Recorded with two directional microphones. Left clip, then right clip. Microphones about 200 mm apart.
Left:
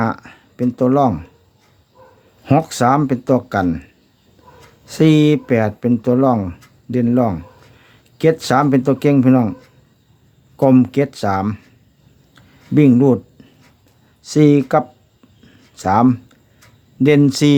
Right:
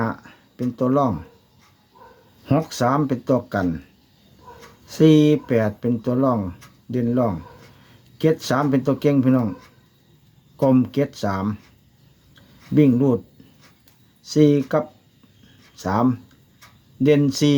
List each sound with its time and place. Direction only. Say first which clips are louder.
0.0 s speech: left 6 dB; 35° left (ahead or behind)
2.4 s speech: left 6 dB; 30° left (ahead or behind)
4.9 s speech: left 2 dB; 30° left (ahead or behind)
10.6 s speech: left 5 dB; 35° left (ahead or behind)
12.3 s a sound: left 4 dB; 35° left (ahead or behind)
14.3 s speech: left 4 dB; 35° left (ahead or behind)